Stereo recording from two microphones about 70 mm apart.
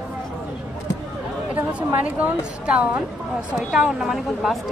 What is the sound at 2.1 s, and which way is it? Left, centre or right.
Speech, centre.